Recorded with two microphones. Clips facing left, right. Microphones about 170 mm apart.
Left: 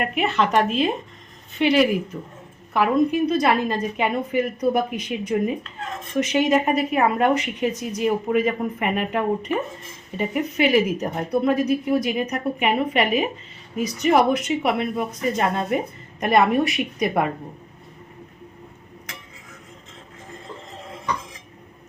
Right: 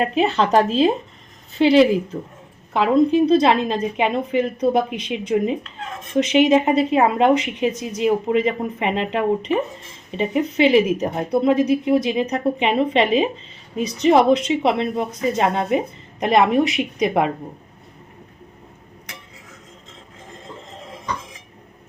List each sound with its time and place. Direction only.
0.0 s a woman's voice: 30° right (ahead or behind)